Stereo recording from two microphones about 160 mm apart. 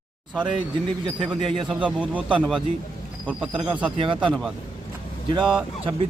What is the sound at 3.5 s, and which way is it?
Speech, 30° right (ahead or behind).